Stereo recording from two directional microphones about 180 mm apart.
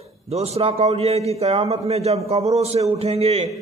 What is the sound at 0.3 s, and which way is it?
A man's voice, 35° right (ahead or behind).